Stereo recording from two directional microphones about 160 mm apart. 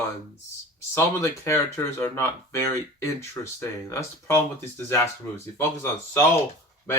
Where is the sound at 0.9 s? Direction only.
15° left (ahead or behind).